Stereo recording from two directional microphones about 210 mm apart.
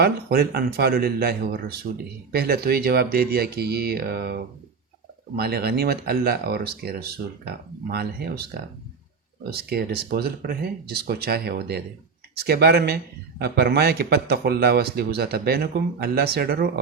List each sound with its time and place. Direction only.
0.0 s a man's voice: 50° right (ahead or behind)
9.6 s a man's voice: 50° right (ahead or behind)